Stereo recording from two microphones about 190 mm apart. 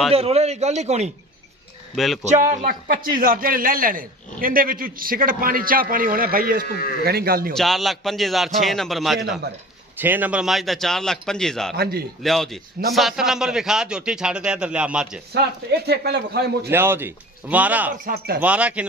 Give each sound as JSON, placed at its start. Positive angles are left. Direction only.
{"t": 0.1, "sound": "a man's voice", "side_deg": -30}
{"t": 2.2, "sound": "a man's voice", "side_deg": -40}
{"t": 7.5, "sound": "a man's voice", "side_deg": 0}
{"t": 11.7, "sound": "a man's voice", "side_deg": -55}
{"t": 12.2, "sound": "a man's voice", "side_deg": 0}
{"t": 15.3, "sound": "a man's voice", "side_deg": -55}
{"t": 16.7, "sound": "speech", "side_deg": -10}
{"t": 18.0, "sound": "a man's voice", "side_deg": -50}
{"t": 18.4, "sound": "speech", "side_deg": -5}